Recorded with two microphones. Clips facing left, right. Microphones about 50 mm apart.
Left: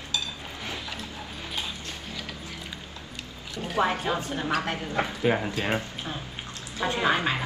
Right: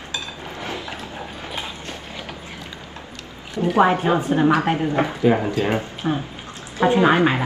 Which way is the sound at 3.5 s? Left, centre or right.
Right.